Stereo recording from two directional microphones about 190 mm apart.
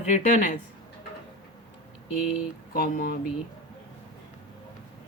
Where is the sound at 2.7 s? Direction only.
50° left (ahead or behind).